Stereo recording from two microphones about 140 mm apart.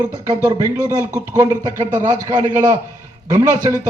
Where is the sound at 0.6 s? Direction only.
20° right (ahead or behind).